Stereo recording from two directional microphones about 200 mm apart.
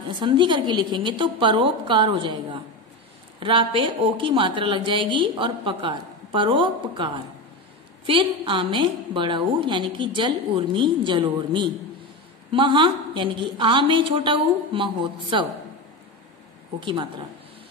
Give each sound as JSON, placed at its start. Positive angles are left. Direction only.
{"t": 0.2, "sound": "speech", "side_deg": -25}
{"t": 8.1, "sound": "speech", "side_deg": -25}
{"t": 16.8, "sound": "speech", "side_deg": -20}